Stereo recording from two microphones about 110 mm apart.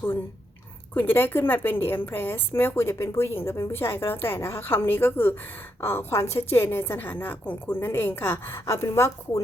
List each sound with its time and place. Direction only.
0.9 s a woman's voice: 20° left (ahead or behind)